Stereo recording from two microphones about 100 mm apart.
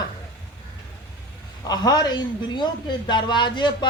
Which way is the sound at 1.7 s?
40° left (ahead or behind).